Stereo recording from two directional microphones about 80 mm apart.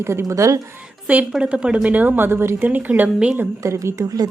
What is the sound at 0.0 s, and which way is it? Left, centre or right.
Speech, right.